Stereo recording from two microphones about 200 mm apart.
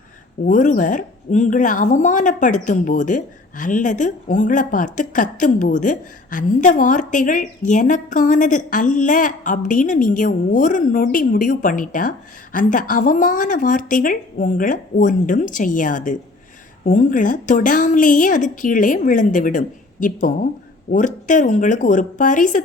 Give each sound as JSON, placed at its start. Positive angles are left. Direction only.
{"t": 0.4, "sound": "a woman's voice", "side_deg": 40}